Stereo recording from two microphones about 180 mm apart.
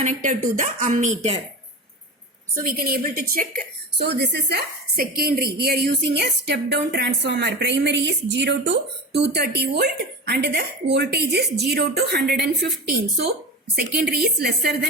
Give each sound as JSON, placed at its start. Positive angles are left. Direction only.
{"t": 0.0, "sound": "speech", "side_deg": -45}
{"t": 2.6, "sound": "a woman's voice", "side_deg": -55}
{"t": 13.7, "sound": "a woman's voice", "side_deg": -60}